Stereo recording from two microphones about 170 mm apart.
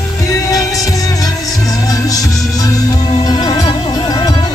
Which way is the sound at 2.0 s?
20° left (ahead or behind).